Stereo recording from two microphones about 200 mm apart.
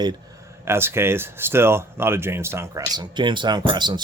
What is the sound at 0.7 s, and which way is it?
Speech, 10° right (ahead or behind).